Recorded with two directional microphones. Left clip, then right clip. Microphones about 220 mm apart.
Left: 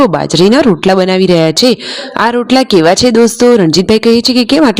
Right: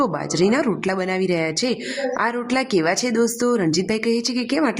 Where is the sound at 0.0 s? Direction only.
35° left (ahead or behind).